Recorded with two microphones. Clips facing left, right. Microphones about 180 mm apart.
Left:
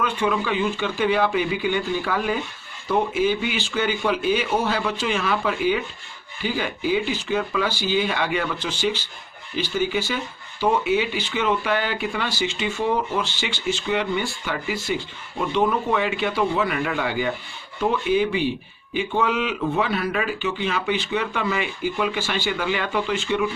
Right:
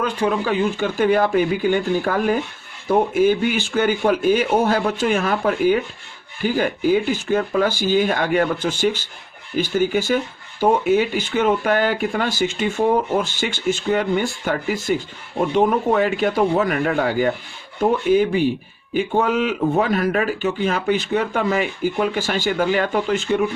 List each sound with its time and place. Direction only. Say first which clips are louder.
0.0 s speech: right 3 dB; 40° right (ahead or behind)